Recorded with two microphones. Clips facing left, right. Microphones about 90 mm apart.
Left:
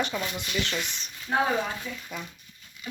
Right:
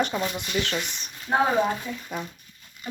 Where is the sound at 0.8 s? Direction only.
5° right (ahead or behind).